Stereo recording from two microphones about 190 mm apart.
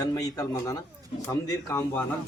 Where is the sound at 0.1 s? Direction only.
20° left (ahead or behind).